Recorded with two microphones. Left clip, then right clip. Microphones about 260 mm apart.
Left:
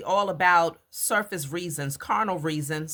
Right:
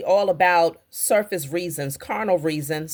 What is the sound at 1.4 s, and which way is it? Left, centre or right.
Speech, centre.